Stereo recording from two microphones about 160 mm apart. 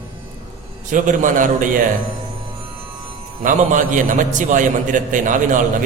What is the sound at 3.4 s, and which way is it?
A man's voice, 55° right (ahead or behind).